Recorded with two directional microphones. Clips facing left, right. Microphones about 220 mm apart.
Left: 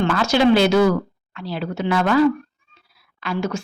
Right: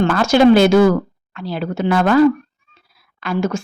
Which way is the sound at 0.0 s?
50° right (ahead or behind).